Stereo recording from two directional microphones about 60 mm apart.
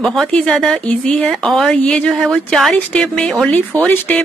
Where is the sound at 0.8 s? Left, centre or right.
Left.